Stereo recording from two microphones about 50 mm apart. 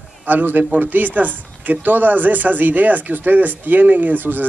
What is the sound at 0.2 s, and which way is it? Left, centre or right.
Speech, right.